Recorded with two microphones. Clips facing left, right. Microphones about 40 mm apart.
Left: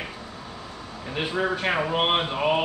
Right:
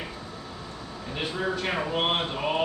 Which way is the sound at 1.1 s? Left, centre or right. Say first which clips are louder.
Left 4 dB; centre.